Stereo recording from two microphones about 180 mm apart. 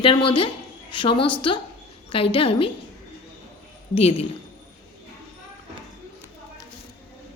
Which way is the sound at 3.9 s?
35° left (ahead or behind).